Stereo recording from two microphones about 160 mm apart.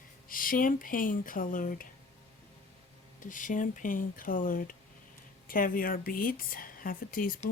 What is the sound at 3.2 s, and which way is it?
A woman's voice, 55° left (ahead or behind).